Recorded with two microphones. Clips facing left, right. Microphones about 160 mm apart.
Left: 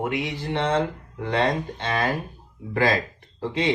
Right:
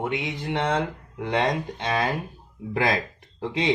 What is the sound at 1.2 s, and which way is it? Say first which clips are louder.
Speech: left 1 dB; 15° right (ahead or behind).